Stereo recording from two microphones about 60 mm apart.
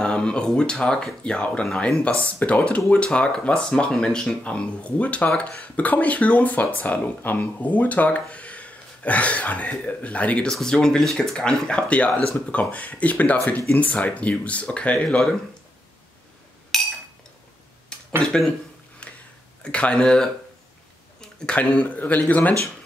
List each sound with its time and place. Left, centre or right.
0.0 s speech: centre
10.5 s speech: centre
11.3 s speech: centre
16.7 s chink: centre
18.2 s speech: centre
19.0 s a sound: left
19.6 s speech: centre
21.5 s speech: left